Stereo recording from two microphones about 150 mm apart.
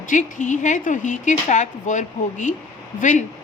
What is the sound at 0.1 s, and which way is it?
Speech, 55° left (ahead or behind).